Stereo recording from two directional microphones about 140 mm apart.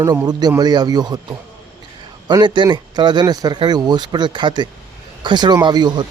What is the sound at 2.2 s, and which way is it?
Speech, 30° right (ahead or behind).